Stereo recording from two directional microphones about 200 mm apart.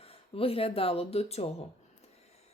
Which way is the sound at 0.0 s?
30° left (ahead or behind).